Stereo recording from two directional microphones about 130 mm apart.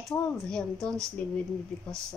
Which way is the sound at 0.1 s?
5° left (ahead or behind).